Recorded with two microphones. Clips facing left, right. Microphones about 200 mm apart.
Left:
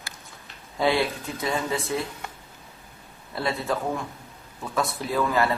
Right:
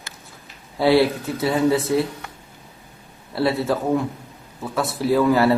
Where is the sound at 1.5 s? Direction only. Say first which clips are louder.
Right 9 dB; 20° right (ahead or behind).